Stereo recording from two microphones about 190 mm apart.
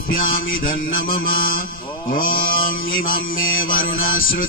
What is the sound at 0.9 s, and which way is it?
Music, 50° left (ahead or behind).